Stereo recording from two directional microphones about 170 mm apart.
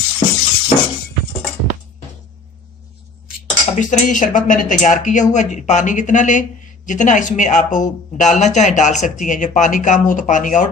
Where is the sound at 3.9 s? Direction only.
50° left (ahead or behind).